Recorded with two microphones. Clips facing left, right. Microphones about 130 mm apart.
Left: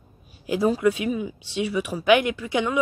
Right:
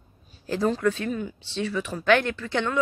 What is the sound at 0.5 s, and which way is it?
A woman's voice, 10° left (ahead or behind).